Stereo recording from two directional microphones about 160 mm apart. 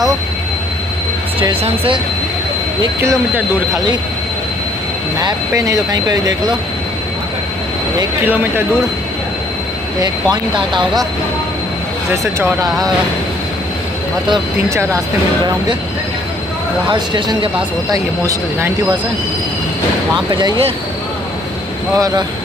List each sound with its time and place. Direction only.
3.0 s speech: 20° right (ahead or behind)
5.2 s speech: 20° right (ahead or behind)
10.3 s speech: 30° right (ahead or behind)
16.9 s speech: 30° right (ahead or behind)
20.2 s speech: 25° right (ahead or behind)
21.9 s speech: 20° right (ahead or behind)